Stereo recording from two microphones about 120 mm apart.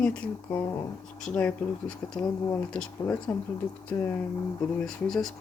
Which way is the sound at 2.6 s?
10° left (ahead or behind).